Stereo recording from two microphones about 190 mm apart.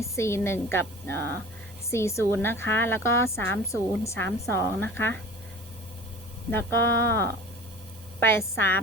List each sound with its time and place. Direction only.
0.0 s a woman's voice: 15° left (ahead or behind)
6.5 s a woman's voice: 10° left (ahead or behind)